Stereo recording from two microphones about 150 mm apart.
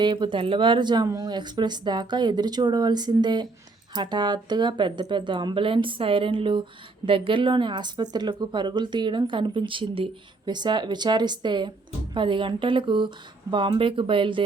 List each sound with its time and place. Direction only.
0.0 s speech: 30° right (ahead or behind)